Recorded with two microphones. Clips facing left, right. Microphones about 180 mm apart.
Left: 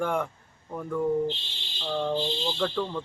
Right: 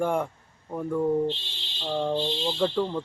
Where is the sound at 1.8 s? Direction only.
15° right (ahead or behind).